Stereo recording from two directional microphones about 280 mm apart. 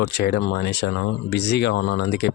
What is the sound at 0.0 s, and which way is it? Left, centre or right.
Speech, left.